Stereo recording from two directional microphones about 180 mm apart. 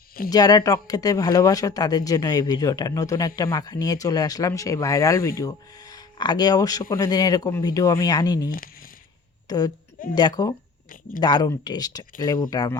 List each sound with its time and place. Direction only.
0.3 s speech: 20° left (ahead or behind)
8.4 s speech: 50° left (ahead or behind)
9.5 s speech: 20° left (ahead or behind)